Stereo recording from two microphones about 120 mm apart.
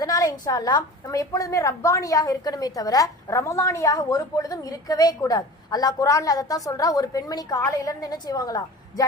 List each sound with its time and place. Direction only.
0.0 s a woman's voice: 30° left (ahead or behind)